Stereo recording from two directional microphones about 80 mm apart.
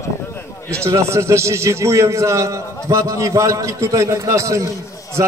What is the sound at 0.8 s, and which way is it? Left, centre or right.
A man's voice, right.